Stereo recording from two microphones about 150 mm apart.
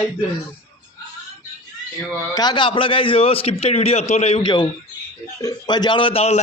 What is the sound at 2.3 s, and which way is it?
A man's voice, 30° left (ahead or behind).